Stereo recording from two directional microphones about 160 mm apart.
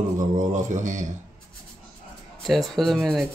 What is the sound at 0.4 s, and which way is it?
Speech, 50° right (ahead or behind).